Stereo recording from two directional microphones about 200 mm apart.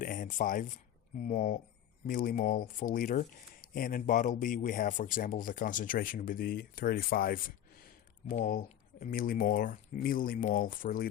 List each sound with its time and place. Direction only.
0.0 s speech: 45° left (ahead or behind)